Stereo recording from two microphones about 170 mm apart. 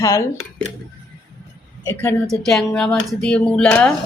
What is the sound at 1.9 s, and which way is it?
Speech, 10° left (ahead or behind).